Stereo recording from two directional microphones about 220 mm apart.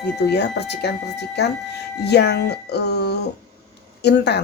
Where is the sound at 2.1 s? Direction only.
50° left (ahead or behind).